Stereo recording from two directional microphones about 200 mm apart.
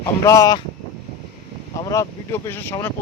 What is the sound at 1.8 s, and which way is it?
Speech, 15° left (ahead or behind).